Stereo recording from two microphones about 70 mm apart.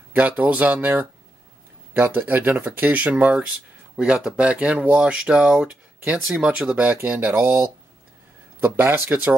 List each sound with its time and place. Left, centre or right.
0.1 s speech: right
3.9 s speech: centre; by 7.1 s right
7.3 s speech: right